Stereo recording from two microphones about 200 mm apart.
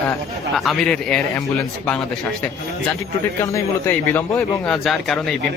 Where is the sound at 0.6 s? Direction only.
Centre (ahead or behind).